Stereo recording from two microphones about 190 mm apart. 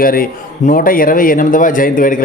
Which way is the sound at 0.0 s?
50° left (ahead or behind).